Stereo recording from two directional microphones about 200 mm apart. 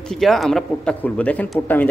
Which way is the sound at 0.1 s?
Centre (ahead or behind).